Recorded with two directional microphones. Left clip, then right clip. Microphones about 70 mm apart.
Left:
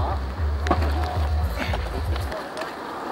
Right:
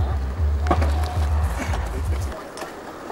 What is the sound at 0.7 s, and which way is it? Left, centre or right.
Music, centre.